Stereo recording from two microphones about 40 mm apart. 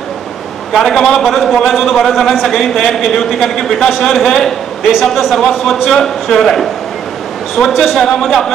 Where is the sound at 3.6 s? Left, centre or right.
Centre.